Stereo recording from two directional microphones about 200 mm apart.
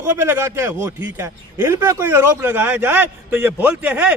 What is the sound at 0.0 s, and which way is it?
Speech, 10° right (ahead or behind).